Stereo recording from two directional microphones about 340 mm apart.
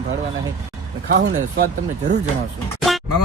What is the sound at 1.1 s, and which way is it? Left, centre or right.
Speech, right.